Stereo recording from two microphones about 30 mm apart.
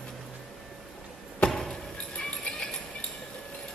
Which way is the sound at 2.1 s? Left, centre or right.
Left.